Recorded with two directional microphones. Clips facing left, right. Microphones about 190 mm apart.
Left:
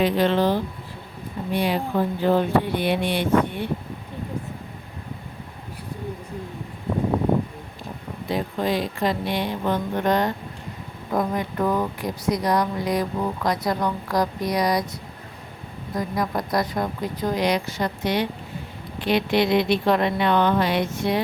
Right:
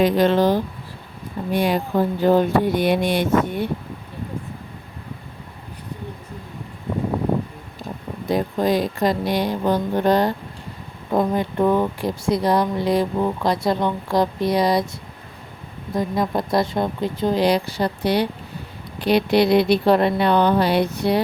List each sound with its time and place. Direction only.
0.0 s speech: 45° right (ahead or behind)
8.3 s speech: 40° right (ahead or behind)
16.0 s speech: 25° right (ahead or behind)